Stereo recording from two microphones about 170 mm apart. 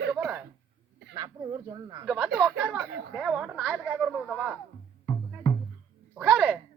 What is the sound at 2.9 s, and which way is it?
Speech, 80° right.